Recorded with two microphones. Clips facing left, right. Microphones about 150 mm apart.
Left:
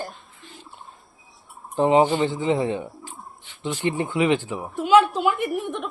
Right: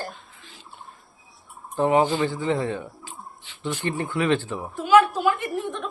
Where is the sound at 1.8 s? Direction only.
20° left (ahead or behind).